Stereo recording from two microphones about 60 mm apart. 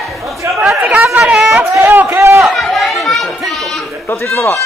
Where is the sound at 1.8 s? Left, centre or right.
Right.